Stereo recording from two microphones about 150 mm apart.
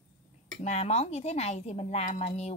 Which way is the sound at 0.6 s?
45° left (ahead or behind).